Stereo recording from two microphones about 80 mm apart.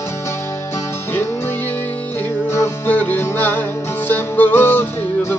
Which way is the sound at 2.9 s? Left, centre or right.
Left.